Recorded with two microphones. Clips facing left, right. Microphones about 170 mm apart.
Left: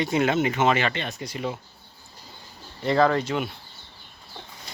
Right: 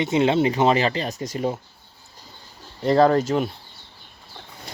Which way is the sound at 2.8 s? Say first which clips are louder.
Right 4 dB; 40° right (ahead or behind).